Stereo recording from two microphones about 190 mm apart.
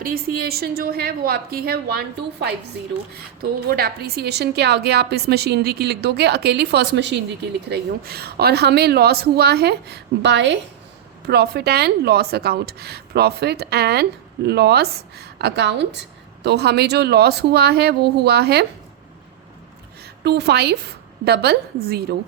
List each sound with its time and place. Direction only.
0.0 s a woman's voice: 50° right (ahead or behind)
20.2 s a woman's voice: 60° right (ahead or behind)